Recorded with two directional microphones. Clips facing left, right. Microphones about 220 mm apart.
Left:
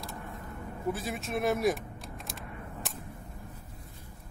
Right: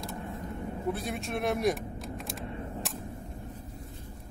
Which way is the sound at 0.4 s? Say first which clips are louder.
Right 5 dB; 25° right (ahead or behind).